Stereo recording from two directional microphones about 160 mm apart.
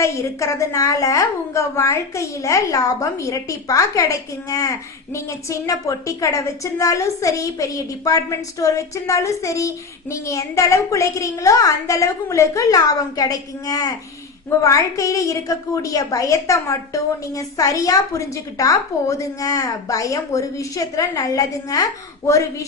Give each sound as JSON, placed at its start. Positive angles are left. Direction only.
{"t": 0.0, "sound": "a woman's voice", "side_deg": 20}